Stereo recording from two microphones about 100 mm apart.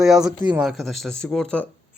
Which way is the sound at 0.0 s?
5° right (ahead or behind).